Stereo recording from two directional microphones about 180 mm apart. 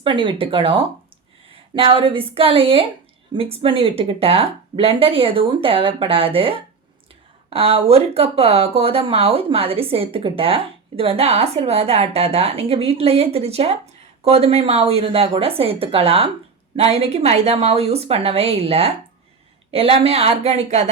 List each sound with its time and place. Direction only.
0.0 s speech: 30° right (ahead or behind)